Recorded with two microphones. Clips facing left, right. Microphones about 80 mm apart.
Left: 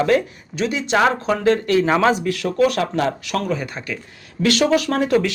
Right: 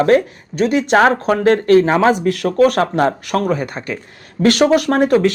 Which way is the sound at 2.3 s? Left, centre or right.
Right.